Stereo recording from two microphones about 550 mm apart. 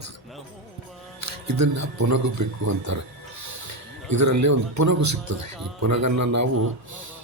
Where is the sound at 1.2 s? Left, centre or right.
Right.